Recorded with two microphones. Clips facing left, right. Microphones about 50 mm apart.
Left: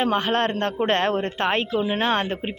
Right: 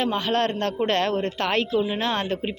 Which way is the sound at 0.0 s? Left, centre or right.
Left.